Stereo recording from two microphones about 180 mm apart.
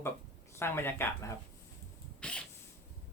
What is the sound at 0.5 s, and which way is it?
Speech, 15° left (ahead or behind).